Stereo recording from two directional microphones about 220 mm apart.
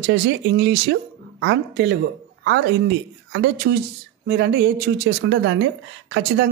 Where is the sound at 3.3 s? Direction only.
50° right (ahead or behind).